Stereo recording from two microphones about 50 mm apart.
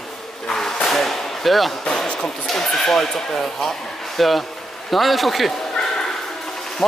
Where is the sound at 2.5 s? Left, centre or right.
Centre.